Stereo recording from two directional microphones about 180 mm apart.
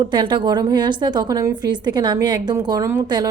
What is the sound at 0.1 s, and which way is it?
A woman's voice, 25° right (ahead or behind).